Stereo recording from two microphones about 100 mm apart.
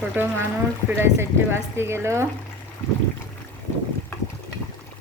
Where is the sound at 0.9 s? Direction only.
25° right (ahead or behind).